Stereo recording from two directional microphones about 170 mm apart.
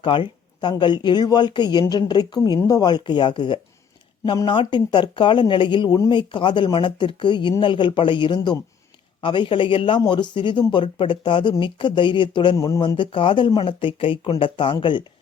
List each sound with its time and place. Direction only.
0.0 s speech: 30° left (ahead or behind)